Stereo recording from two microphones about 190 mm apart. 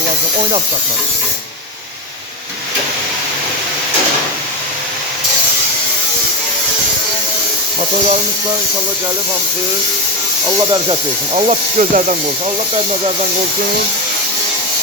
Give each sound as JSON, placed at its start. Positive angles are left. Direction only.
{"t": 11.3, "sound": "speech", "side_deg": -40}